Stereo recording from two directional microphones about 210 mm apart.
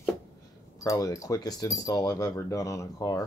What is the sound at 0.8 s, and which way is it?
Speech, 15° left (ahead or behind).